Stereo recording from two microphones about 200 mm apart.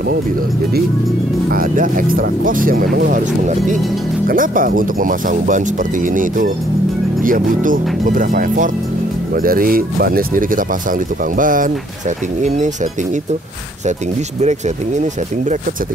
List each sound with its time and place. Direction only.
1.5 s speech: 45° right (ahead or behind)
14.4 s speech: 35° right (ahead or behind)